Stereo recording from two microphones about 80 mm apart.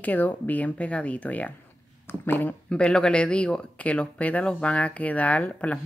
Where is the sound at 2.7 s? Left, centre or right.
Centre.